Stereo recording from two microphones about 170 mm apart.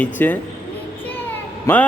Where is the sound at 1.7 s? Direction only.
15° left (ahead or behind).